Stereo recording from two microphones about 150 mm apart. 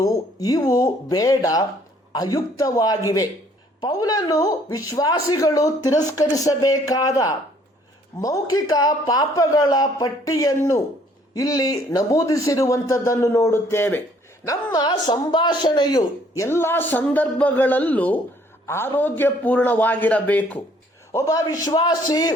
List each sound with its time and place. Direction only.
0.0 s a man's voice: 25° left (ahead or behind)